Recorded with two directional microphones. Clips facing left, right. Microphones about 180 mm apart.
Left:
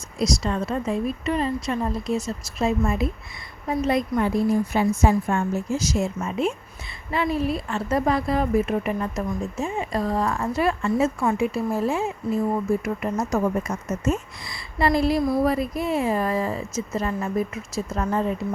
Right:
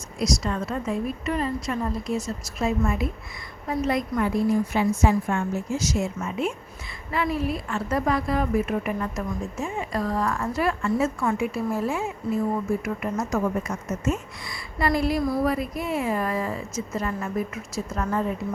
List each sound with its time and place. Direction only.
0.2 s speech: 30° left (ahead or behind)
4.7 s a woman's voice: 40° left (ahead or behind)